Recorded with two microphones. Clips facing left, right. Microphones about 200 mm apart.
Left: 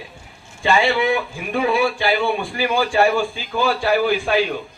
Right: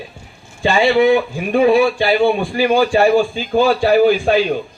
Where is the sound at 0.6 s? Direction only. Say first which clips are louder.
Right 5 dB; 35° right (ahead or behind).